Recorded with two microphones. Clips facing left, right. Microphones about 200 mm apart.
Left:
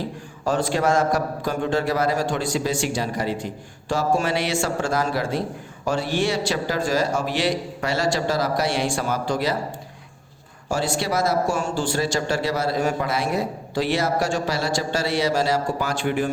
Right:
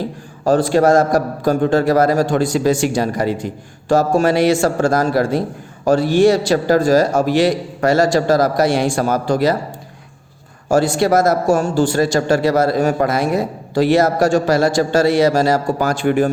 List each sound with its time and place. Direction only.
0.4 s speech: 35° right (ahead or behind)
10.7 s speech: 45° right (ahead or behind)